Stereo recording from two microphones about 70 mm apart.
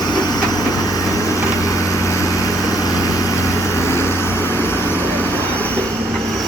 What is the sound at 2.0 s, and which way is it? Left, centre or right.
Vehicle, left.